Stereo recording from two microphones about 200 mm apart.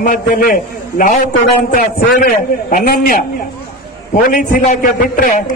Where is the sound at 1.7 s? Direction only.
45° left (ahead or behind).